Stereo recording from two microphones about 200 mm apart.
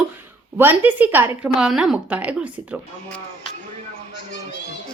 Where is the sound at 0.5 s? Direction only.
10° right (ahead or behind).